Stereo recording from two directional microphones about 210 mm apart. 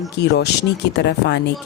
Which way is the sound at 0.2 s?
55° left (ahead or behind).